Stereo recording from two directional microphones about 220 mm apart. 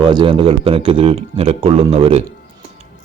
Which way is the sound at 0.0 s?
20° right (ahead or behind).